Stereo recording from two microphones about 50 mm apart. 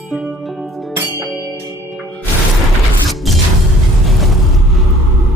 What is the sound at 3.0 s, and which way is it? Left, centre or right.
Music, centre.